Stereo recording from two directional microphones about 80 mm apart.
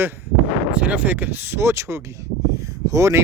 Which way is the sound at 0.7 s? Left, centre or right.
Centre.